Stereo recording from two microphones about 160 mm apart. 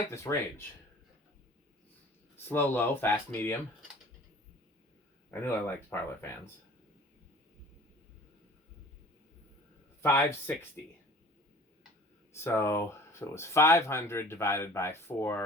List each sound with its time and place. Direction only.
0.1 s speech: 20° left (ahead or behind)
2.5 s speech: 10° left (ahead or behind)
5.3 s speech: 15° left (ahead or behind)
10.0 s speech: 15° left (ahead or behind)
12.3 s speech: 15° left (ahead or behind)